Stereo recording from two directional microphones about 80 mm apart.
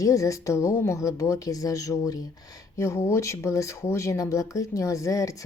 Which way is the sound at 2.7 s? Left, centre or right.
Left.